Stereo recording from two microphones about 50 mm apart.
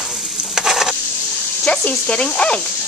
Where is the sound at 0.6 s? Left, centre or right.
Centre.